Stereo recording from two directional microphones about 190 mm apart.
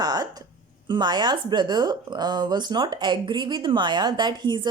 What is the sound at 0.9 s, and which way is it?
A woman's voice, 25° right (ahead or behind).